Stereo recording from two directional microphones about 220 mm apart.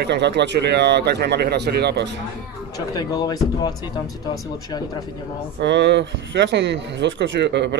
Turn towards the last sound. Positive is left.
turn(degrees=-50)  # may be behind; listen again after turning